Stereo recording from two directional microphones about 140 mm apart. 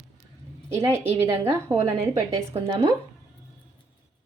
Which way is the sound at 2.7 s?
30° right (ahead or behind).